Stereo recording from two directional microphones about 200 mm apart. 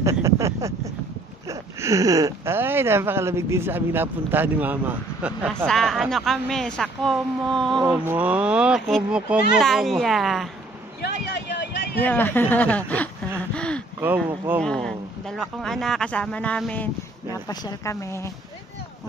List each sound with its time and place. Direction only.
0.0 s a sound: 15° right (ahead or behind)
1.5 s speech: 15° right (ahead or behind); by 10.5 s centre (ahead or behind)
11.0 s a sound: 55° left (ahead or behind)
12.0 s speech: 10° left (ahead or behind)
13.6 s gasp: 5° left (ahead or behind)
14.0 s speech: 10° right (ahead or behind)
14.6 s speech: 5° left (ahead or behind)
17.5 s speech: 20° left (ahead or behind)